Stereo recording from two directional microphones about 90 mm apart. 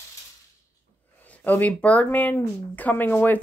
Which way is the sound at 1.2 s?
15° left (ahead or behind).